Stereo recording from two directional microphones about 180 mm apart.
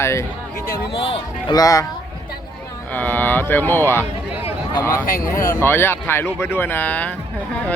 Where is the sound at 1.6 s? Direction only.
20° left (ahead or behind).